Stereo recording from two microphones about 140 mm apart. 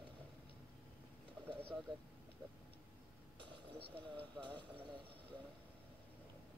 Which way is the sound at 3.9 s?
10° left (ahead or behind).